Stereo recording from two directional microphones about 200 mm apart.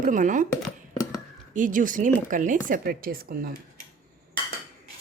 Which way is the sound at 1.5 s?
40° right (ahead or behind).